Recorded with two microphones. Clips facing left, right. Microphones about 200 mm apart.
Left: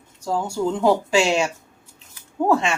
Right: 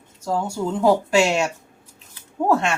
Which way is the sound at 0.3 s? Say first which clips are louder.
Left 1 dB; centre (ahead or behind).